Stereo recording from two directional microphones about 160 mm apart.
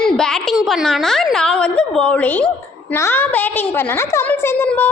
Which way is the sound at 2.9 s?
15° left (ahead or behind).